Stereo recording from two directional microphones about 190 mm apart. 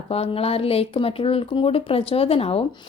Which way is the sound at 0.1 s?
30° left (ahead or behind).